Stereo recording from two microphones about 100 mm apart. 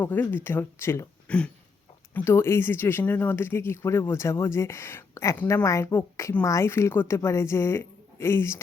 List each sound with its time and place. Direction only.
0.0 s speech: 20° left (ahead or behind)
1.3 s a sound: 10° left (ahead or behind)
2.1 s speech: 25° left (ahead or behind)